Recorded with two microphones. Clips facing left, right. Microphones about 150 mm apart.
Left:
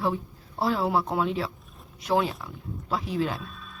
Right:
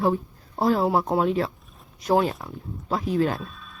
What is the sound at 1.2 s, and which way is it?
Speech, 45° right (ahead or behind).